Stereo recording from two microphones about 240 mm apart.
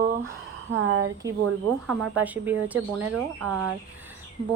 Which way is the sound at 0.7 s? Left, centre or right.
Right.